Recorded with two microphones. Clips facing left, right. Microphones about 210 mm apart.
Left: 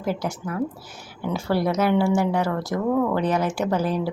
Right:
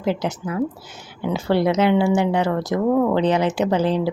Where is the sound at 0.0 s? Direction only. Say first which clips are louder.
Right 4 dB; 20° right (ahead or behind).